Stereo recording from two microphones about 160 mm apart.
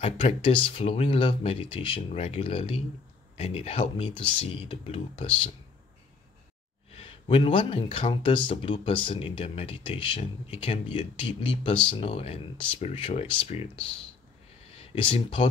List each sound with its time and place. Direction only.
0.0 s speech: 40° left (ahead or behind)
6.9 s speech: 35° left (ahead or behind)